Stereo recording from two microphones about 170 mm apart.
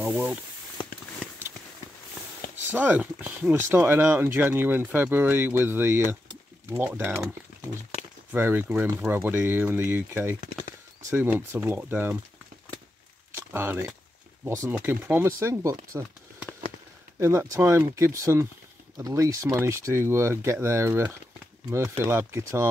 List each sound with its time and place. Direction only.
0.0 s speech: 5° right (ahead or behind)
0.8 s a sound: 30° left (ahead or behind)
2.5 s speech: 10° right (ahead or behind)
13.3 s speech: 15° right (ahead or behind)
17.2 s speech: 15° right (ahead or behind)